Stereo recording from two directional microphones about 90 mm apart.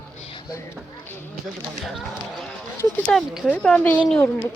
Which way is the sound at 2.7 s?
25° left (ahead or behind).